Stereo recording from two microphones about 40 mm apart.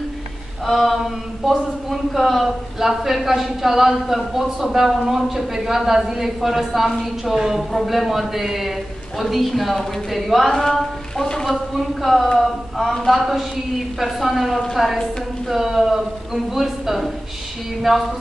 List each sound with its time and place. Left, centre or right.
0.7 s a man's voice: centre
11.5 s a man's voice: centre